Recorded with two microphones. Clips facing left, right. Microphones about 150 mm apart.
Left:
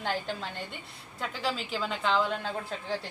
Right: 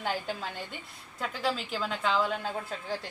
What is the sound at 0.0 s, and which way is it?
Speech, 5° right (ahead or behind).